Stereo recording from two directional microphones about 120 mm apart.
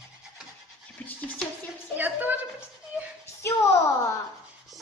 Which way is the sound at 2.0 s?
15° right (ahead or behind).